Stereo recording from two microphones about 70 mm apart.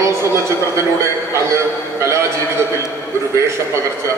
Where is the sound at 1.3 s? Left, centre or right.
Right.